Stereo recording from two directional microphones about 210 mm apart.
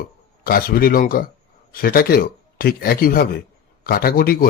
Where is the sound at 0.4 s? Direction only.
45° left (ahead or behind).